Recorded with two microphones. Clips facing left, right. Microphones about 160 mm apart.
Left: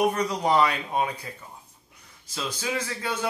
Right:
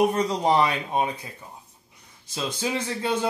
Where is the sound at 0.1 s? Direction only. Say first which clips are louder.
Right 2 dB; 25° right (ahead or behind).